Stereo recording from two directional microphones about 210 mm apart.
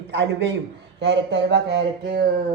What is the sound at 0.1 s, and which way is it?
Speech, 55° right (ahead or behind).